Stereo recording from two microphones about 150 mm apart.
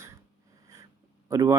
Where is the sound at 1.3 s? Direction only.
25° right (ahead or behind).